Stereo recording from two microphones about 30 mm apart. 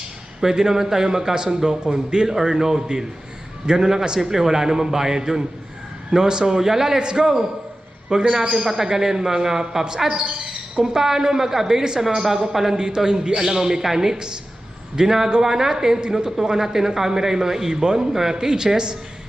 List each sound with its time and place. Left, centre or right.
0.4 s speech: centre
12.7 s speech: right